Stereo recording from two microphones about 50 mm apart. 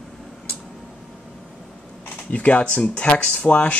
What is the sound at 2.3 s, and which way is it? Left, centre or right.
Speech, left.